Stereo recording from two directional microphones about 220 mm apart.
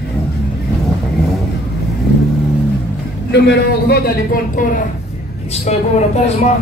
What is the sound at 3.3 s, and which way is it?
A man's voice, 50° left (ahead or behind).